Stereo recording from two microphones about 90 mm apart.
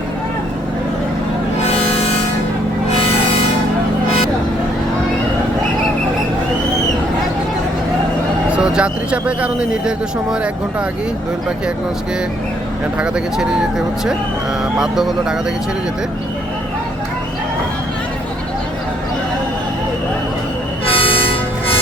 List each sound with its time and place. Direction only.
8.4 s speech: 10° right (ahead or behind)
13.0 s speech: 10° right (ahead or behind)
20.8 s train: 90° left